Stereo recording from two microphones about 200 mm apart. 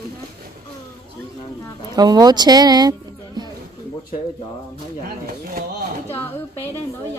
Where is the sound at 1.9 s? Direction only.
20° right (ahead or behind).